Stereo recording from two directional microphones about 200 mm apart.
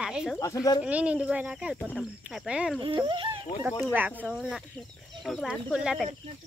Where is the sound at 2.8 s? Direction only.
25° right (ahead or behind).